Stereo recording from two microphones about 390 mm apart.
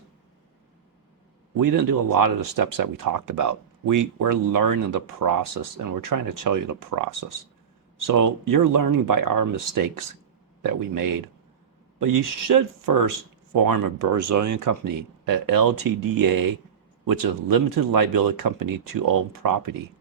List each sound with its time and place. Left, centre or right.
1.5 s speech: right